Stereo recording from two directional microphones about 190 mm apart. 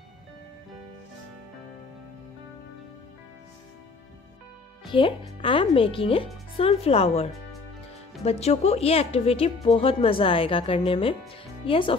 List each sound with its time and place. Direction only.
4.8 s speech: 25° left (ahead or behind)